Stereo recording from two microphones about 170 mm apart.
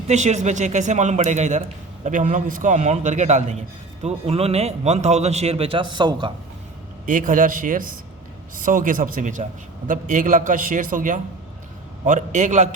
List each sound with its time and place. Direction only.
0.1 s a man's voice: 45° right (ahead or behind); by 6.3 s 25° right (ahead or behind)
7.0 s a man's voice: 50° right (ahead or behind)